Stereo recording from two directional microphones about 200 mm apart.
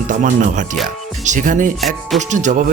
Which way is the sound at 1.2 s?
40° right (ahead or behind).